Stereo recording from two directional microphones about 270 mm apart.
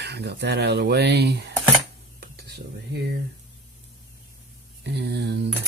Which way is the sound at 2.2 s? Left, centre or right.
Right.